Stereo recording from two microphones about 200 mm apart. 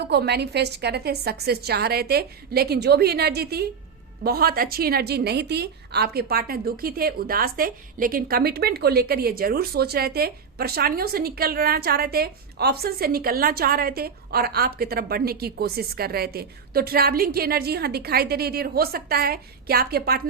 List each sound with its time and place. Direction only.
0.0 s a woman's voice: 55° right (ahead or behind)